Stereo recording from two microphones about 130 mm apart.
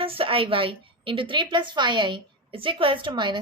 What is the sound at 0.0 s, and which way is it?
A woman's voice, 45° right (ahead or behind).